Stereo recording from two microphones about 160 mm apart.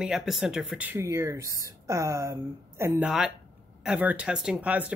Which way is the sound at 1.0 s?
20° right (ahead or behind).